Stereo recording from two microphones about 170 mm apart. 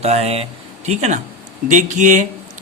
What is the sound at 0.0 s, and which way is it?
Speech, 40° right (ahead or behind).